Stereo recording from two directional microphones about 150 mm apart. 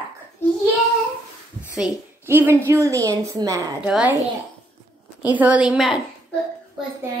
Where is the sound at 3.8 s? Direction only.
5° right (ahead or behind).